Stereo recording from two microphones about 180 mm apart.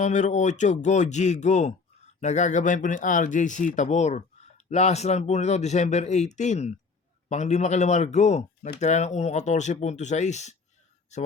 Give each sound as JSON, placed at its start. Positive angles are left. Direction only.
{"t": 0.0, "sound": "speech", "side_deg": 40}